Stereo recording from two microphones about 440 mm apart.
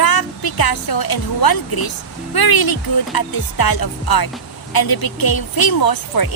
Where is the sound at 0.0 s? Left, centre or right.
Left.